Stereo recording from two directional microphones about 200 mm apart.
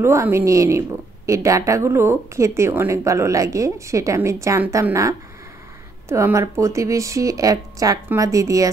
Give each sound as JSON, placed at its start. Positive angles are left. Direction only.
{"t": 0.0, "sound": "a woman's voice", "side_deg": -15}